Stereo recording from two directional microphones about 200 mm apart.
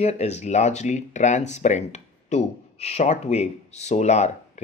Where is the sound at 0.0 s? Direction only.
35° left (ahead or behind).